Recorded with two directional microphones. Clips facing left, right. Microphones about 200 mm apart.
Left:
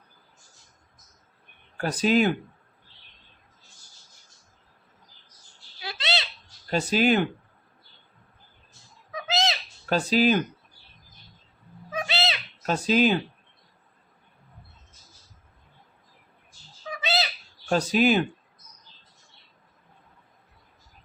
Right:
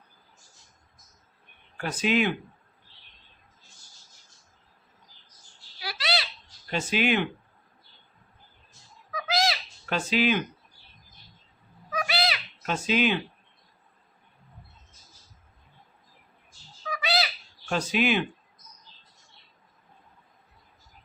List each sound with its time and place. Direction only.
1.8 s speech: 35° left (ahead or behind)
5.8 s a sound: 25° left (ahead or behind)
6.7 s speech: 40° left (ahead or behind)
9.1 s bird: 25° left (ahead or behind)
9.9 s speech: 40° left (ahead or behind)
11.9 s cat: 25° left (ahead or behind)
12.6 s speech: 40° left (ahead or behind)
16.9 s owl: 25° left (ahead or behind)
17.7 s speech: 40° left (ahead or behind)